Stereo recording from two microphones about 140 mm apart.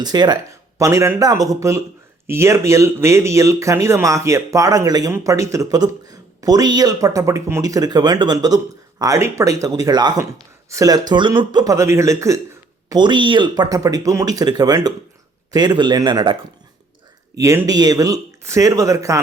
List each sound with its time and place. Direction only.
0.0 s speech: 30° right (ahead or behind)
12.9 s speech: 30° right (ahead or behind)
17.3 s speech: 20° right (ahead or behind)